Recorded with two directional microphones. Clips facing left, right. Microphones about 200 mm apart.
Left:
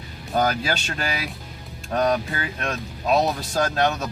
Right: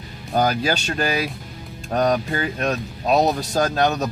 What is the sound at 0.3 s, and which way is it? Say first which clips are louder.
Speech: right 3 dB; 40° right (ahead or behind).